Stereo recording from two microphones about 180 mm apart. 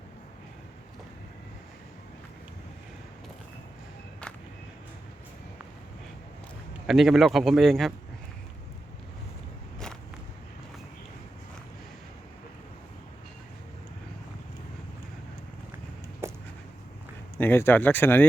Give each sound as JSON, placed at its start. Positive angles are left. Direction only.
{"t": 6.8, "sound": "a man's voice", "side_deg": 0}
{"t": 16.2, "sound": "a sound", "side_deg": -15}
{"t": 17.3, "sound": "speech", "side_deg": 10}